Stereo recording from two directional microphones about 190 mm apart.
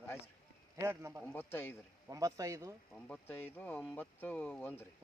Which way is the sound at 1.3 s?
10° left (ahead or behind).